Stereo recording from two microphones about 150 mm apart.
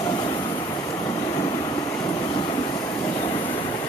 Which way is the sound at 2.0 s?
25° left (ahead or behind).